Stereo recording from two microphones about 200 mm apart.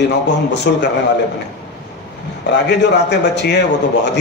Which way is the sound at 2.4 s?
60° left (ahead or behind).